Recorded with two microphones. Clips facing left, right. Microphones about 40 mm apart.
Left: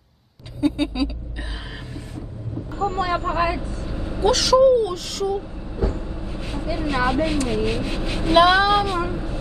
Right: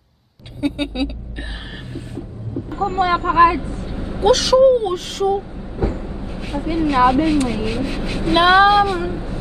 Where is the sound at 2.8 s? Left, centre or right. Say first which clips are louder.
Right 4 dB; right.